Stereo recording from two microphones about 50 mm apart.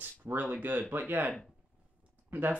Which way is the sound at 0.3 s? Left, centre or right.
Right.